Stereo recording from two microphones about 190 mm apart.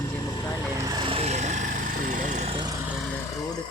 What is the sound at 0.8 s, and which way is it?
Vehicle, 20° right (ahead or behind).